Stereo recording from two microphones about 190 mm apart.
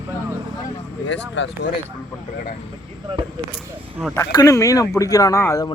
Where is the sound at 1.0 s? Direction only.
70° left (ahead or behind).